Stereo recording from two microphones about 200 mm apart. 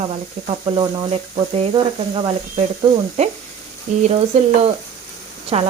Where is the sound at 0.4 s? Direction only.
25° right (ahead or behind).